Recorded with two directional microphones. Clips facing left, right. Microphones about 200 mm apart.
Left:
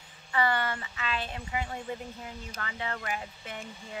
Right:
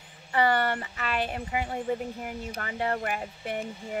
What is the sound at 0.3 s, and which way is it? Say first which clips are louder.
Speech: right 4 dB; 40° right (ahead or behind).